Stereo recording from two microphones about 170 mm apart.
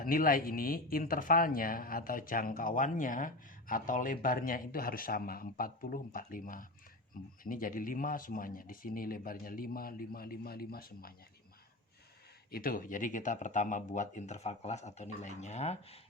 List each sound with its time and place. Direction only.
0.0 s a man's voice: 55° left (ahead or behind)
12.5 s speech: 60° left (ahead or behind); by 16.0 s 40° left (ahead or behind)